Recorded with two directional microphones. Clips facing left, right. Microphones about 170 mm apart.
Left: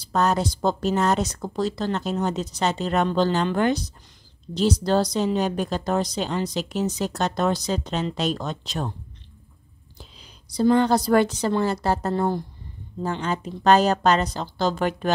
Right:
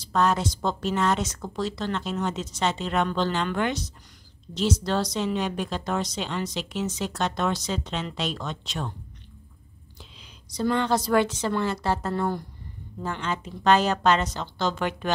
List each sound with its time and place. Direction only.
0.1 s speech: 40° left (ahead or behind)
10.5 s speech: 35° left (ahead or behind)